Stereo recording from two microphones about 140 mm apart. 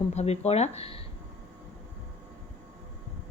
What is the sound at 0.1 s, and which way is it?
Speech, 50° left (ahead or behind).